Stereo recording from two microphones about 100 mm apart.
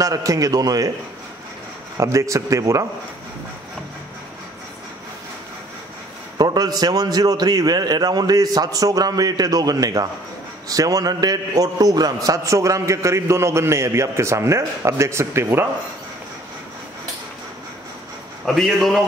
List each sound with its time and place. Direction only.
0.0 s a man's voice: 35° right (ahead or behind)
2.0 s a man's voice: 30° right (ahead or behind)
6.3 s a man's voice: 45° right (ahead or behind); by 15.7 s 25° right (ahead or behind)
18.4 s a man's voice: centre (ahead or behind)